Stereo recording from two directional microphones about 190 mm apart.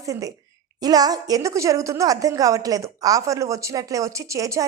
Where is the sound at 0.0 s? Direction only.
15° right (ahead or behind).